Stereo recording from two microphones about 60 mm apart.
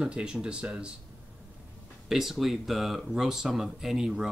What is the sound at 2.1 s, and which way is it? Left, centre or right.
Speech, centre.